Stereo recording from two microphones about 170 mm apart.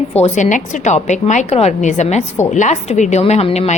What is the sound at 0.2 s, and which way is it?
A woman's voice, 45° left (ahead or behind).